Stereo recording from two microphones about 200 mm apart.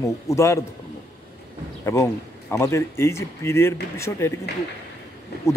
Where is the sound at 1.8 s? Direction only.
15° left (ahead or behind).